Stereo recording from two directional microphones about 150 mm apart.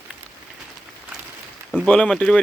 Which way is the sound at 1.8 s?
5° left (ahead or behind).